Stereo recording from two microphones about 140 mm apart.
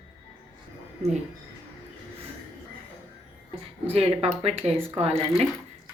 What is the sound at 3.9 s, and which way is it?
Speech, 45° right (ahead or behind).